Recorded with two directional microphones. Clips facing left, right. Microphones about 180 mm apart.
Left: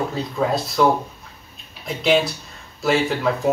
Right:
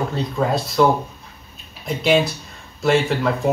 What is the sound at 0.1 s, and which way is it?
Speech, centre (ahead or behind).